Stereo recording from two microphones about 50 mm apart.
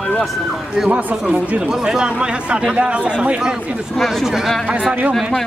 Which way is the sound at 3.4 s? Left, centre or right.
Centre.